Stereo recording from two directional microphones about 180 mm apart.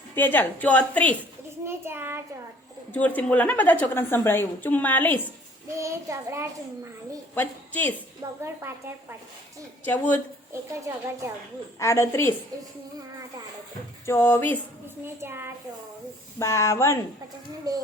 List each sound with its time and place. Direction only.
0.2 s a woman's voice: 10° left (ahead or behind)
1.6 s child singing: 15° right (ahead or behind)
2.9 s a woman's voice: 10° left (ahead or behind)
5.7 s child singing: 15° right (ahead or behind)
7.3 s a woman's voice: 10° left (ahead or behind)
8.2 s child singing: 20° right (ahead or behind)
9.8 s a woman's voice: 10° left (ahead or behind)
10.5 s child singing: 15° right (ahead or behind)
11.8 s a woman's voice: 15° left (ahead or behind)
14.1 s a woman's voice: 10° left (ahead or behind)
15.0 s child singing: 15° right (ahead or behind)
16.4 s a woman's voice: 15° left (ahead or behind)
17.7 s a child's voice: 20° right (ahead or behind)